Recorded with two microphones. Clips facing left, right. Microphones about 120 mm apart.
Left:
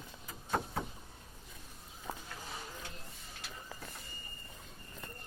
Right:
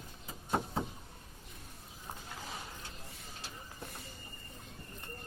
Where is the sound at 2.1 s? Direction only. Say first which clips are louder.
Left 4 dB; 90° left.